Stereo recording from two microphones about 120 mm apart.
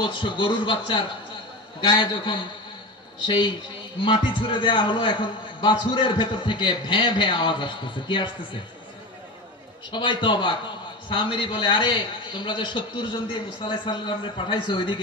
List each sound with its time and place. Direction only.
0.0 s a man's voice: 45° left (ahead or behind)
9.8 s a man's voice: 40° left (ahead or behind)